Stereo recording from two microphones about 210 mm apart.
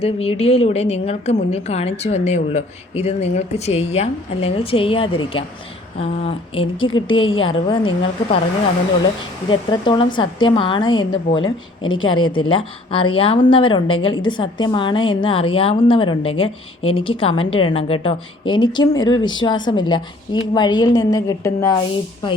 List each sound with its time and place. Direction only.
0.0 s speech: 30° left (ahead or behind)
9.5 s speech: 25° left (ahead or behind)
12.0 s speech: 75° left (ahead or behind)
12.3 s speech: 25° left (ahead or behind)